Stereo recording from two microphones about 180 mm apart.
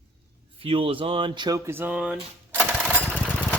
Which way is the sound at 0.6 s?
30° right (ahead or behind).